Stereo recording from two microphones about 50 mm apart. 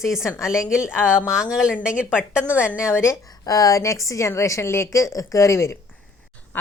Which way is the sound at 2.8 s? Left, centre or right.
Left.